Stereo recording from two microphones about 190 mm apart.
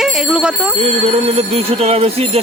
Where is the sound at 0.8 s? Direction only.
30° right (ahead or behind).